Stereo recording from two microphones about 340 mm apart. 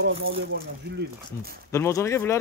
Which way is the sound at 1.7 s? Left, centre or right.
Centre.